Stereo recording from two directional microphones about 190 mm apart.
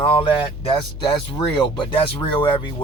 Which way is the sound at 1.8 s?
30° left (ahead or behind).